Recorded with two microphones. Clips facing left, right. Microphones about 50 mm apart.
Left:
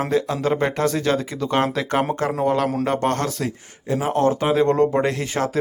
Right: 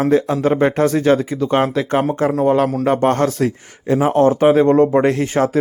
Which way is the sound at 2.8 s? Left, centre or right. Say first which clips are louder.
Right 6 dB; centre.